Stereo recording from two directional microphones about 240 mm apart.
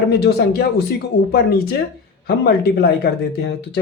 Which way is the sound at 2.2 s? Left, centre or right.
Left.